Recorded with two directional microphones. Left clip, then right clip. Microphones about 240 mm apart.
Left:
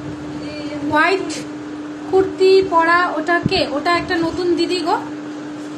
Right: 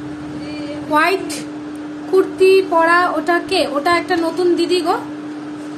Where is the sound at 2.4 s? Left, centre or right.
Centre.